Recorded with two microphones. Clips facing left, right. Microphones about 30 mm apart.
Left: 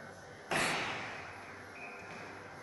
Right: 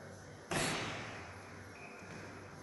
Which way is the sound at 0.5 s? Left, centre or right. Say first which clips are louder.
Left 4 dB; left.